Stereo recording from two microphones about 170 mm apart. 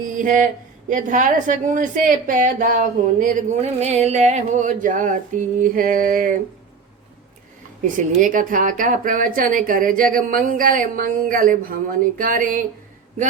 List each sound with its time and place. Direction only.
0.0 s a woman's voice: 50° right (ahead or behind)
7.9 s a woman's voice: 50° right (ahead or behind)